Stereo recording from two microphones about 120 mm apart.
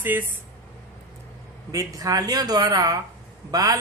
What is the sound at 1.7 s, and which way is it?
Speech, 30° right (ahead or behind).